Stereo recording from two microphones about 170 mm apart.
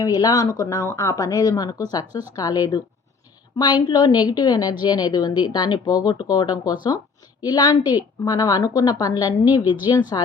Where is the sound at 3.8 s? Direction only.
25° left (ahead or behind).